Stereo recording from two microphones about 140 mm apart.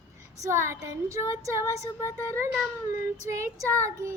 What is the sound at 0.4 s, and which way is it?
Child singing, 20° right (ahead or behind).